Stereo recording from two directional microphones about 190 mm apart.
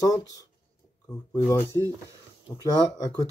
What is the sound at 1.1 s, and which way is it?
Speech, 10° left (ahead or behind).